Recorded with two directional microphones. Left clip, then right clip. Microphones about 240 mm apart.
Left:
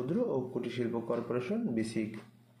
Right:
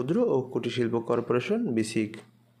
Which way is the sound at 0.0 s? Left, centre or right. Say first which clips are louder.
Right 7 dB; right.